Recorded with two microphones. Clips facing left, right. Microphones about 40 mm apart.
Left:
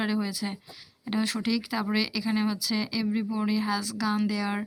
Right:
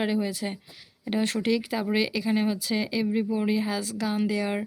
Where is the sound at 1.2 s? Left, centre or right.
Right.